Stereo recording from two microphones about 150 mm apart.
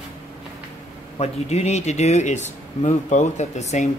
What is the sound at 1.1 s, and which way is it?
Speech, 45° left (ahead or behind).